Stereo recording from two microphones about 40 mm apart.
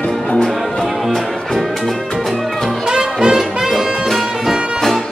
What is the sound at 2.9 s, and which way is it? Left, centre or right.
Music, centre.